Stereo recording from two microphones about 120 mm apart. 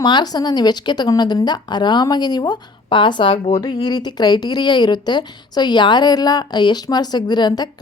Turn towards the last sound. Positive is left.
turn(degrees=35)  # may be behind; listen again after turning